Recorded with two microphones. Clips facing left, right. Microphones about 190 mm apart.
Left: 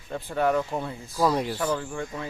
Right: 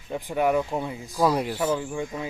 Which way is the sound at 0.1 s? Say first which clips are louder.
Right 1 dB; 15° right (ahead or behind).